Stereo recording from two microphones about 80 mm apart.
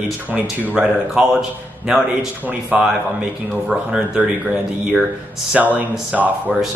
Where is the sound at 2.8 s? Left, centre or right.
Centre.